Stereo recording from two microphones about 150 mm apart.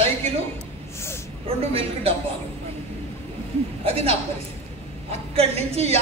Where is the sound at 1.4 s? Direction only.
40° right (ahead or behind).